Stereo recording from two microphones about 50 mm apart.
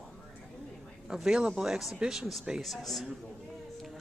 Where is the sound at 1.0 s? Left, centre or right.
Centre.